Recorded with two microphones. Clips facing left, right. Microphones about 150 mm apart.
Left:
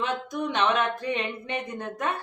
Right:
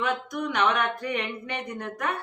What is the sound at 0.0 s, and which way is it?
Speech, 25° left (ahead or behind).